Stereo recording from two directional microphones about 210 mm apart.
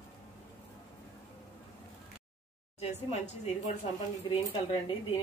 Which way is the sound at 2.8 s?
30° left (ahead or behind).